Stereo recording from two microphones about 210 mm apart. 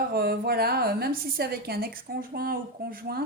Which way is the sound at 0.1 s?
45° right (ahead or behind).